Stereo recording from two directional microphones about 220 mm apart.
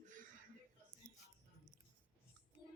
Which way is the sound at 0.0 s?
35° right (ahead or behind).